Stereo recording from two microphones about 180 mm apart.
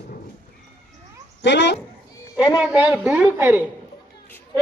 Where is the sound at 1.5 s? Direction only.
75° left (ahead or behind).